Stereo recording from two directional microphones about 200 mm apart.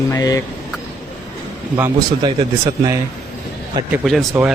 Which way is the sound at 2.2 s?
20° right (ahead or behind).